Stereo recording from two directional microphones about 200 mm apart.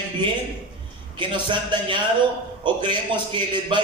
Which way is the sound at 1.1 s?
25° right (ahead or behind).